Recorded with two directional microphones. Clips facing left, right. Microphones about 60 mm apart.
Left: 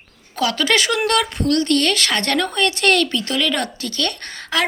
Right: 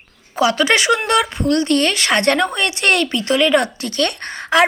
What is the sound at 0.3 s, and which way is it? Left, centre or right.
Speech, centre.